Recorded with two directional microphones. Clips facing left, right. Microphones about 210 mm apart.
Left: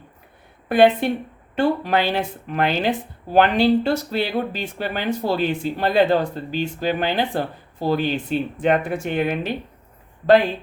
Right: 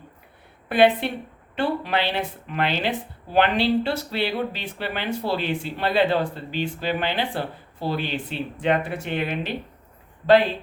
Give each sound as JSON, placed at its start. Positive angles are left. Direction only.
{"t": 0.7, "sound": "speech", "side_deg": 45}